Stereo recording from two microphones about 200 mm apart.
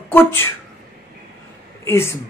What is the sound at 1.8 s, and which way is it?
Speech, 10° left (ahead or behind).